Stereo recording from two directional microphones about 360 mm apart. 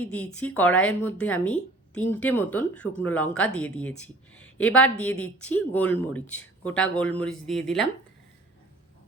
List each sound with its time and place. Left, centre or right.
0.0 s a woman's voice: centre